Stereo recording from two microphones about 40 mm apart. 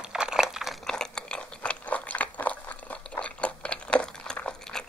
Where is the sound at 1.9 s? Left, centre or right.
Left.